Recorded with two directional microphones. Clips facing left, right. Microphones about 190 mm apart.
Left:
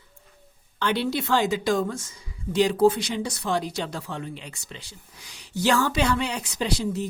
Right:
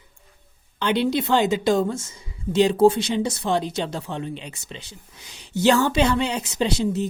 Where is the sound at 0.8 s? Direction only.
20° right (ahead or behind).